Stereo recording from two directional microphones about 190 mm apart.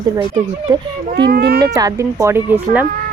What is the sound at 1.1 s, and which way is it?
Speech, 55° right (ahead or behind).